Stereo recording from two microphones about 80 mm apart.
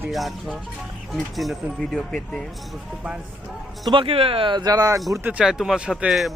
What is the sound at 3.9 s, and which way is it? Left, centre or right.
Speech, right.